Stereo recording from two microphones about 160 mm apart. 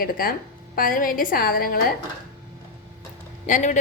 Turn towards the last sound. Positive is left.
turn(degrees=50)  # may be behind; listen again after turning